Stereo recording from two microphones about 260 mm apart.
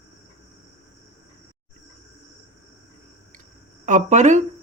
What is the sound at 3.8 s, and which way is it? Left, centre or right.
Speech, right.